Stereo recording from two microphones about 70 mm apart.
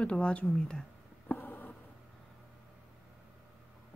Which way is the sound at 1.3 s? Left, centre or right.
Left.